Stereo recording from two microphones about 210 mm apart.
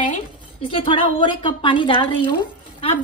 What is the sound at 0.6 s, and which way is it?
A woman's voice, 25° left (ahead or behind).